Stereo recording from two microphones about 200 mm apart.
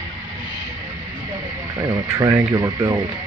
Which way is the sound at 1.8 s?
20° right (ahead or behind).